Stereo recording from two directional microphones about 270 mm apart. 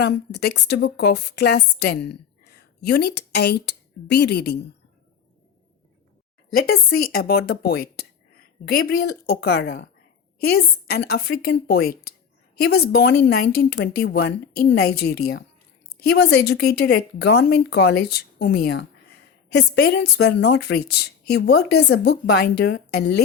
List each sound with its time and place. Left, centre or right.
0.0 s a woman's voice: left
6.5 s a woman's voice: left